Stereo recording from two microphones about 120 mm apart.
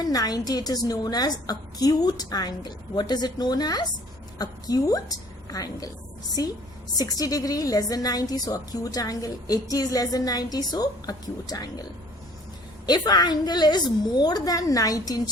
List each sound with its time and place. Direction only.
0.0 s a woman's voice: 30° left (ahead or behind)
6.9 s a woman's voice: 30° left (ahead or behind)